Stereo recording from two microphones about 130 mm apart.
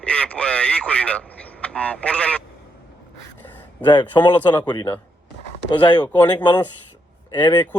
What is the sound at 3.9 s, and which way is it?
Speech, 35° left (ahead or behind).